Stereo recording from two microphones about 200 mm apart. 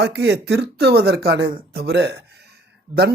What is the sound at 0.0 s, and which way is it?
Speech, 55° right (ahead or behind).